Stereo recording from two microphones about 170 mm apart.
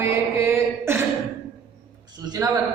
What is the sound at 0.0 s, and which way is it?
Mantra, 15° right (ahead or behind).